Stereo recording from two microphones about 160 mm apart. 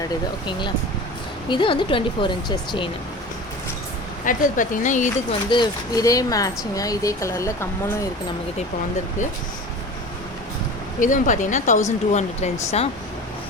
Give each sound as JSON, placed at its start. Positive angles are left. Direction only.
{"t": 1.5, "sound": "speech", "side_deg": 30}
{"t": 4.3, "sound": "speech", "side_deg": 55}
{"t": 5.3, "sound": "speech", "side_deg": 30}
{"t": 11.0, "sound": "speech", "side_deg": 50}